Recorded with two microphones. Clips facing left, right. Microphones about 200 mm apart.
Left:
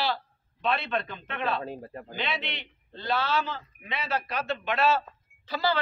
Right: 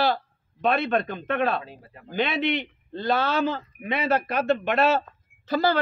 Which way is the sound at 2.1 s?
50° right (ahead or behind).